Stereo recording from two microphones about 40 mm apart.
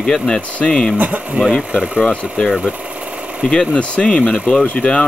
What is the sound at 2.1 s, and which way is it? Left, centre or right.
Speech, left.